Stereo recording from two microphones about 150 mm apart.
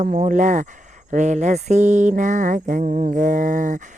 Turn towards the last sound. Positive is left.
turn(degrees=-55)  # may be behind; listen again after turning